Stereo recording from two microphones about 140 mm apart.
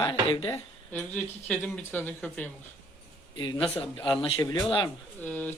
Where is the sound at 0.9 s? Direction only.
10° left (ahead or behind).